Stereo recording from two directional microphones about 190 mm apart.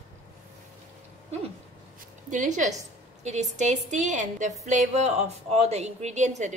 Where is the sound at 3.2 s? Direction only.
35° right (ahead or behind).